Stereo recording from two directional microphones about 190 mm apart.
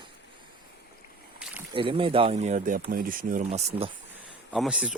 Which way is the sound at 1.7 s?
25° right (ahead or behind).